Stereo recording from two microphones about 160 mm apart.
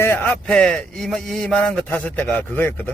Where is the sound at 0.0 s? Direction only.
15° left (ahead or behind).